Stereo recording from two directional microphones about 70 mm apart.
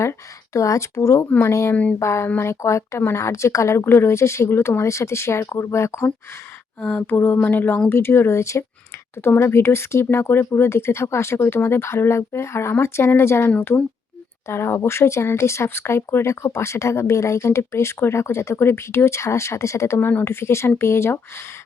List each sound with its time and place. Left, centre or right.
0.0 s speech: left
1.7 s a sound: centre
2.0 s speech: left
6.8 s a sound: left
7.9 s speech: left
20.0 s speech: left